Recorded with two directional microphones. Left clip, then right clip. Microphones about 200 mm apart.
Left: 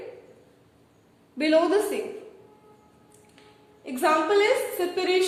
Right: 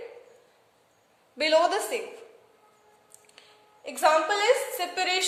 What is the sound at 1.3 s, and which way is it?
Speech, 55° right (ahead or behind).